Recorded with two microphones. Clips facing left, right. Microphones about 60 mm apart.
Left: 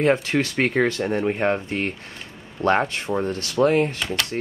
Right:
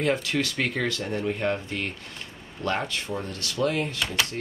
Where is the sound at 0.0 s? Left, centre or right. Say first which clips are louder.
Left 5 dB; left.